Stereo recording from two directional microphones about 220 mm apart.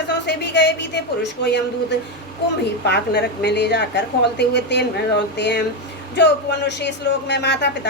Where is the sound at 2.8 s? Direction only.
50° left (ahead or behind).